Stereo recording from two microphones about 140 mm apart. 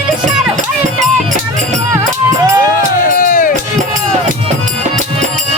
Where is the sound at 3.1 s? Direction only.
75° left (ahead or behind).